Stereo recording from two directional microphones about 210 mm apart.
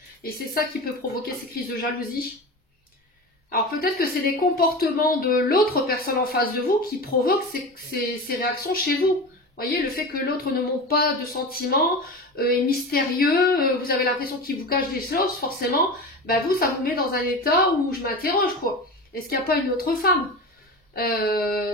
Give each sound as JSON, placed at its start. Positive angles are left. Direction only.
{"t": 1.2, "sound": "a woman's voice", "side_deg": 45}
{"t": 3.4, "sound": "a woman's voice", "side_deg": 45}